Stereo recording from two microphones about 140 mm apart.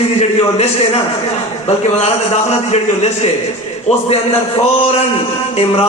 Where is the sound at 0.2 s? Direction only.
45° left (ahead or behind).